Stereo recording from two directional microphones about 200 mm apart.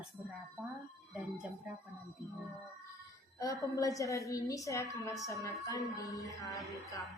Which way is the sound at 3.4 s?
15° left (ahead or behind).